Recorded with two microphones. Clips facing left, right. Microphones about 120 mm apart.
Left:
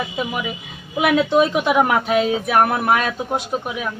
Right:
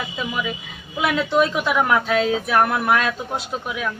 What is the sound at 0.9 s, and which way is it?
A woman's voice, 20° left (ahead or behind).